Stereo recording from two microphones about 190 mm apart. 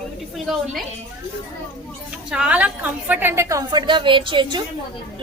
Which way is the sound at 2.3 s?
5° right (ahead or behind).